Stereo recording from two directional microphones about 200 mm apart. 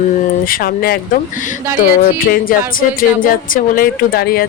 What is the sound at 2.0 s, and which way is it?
Speech, 45° left (ahead or behind).